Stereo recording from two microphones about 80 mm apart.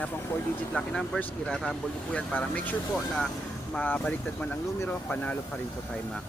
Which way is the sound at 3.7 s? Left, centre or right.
Left.